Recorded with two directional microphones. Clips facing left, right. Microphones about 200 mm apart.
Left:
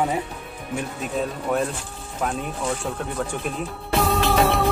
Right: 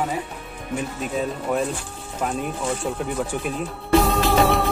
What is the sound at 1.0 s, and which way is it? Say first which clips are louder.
Speech: right 1 dB; centre (ahead or behind).